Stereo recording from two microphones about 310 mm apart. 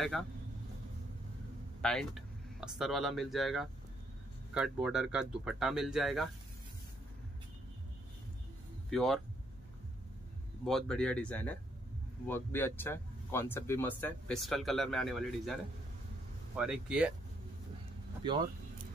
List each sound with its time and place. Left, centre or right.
0.0 s speech: centre
1.8 s speech: centre
8.9 s speech: centre
10.6 s speech: centre
16.5 s speech: centre